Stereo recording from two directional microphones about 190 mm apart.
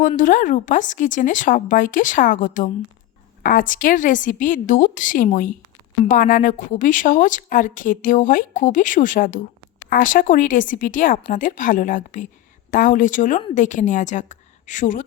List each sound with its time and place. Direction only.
0.2 s a woman's voice: 45° left (ahead or behind)